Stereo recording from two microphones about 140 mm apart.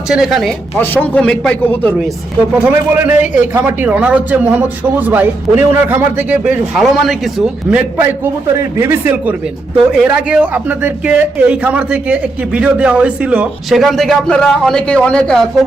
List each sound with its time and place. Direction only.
0.1 s speech: centre (ahead or behind)
0.8 s a man's voice: 10° left (ahead or behind)
2.6 s a man's voice: 10° right (ahead or behind); by 15.4 s 5° left (ahead or behind)